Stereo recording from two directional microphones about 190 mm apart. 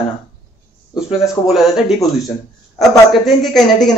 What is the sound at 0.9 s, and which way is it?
Speech, centre (ahead or behind).